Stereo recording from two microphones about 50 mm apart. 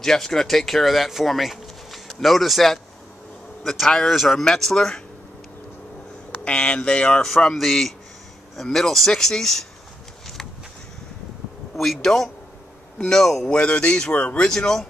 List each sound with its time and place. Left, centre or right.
0.0 s a man's voice: centre
6.4 s speech: left
7.2 s a man's voice: centre
11.7 s speech: centre
12.9 s speech: centre
13.2 s a man's voice: centre
13.5 s speech: centre
14.5 s speech: centre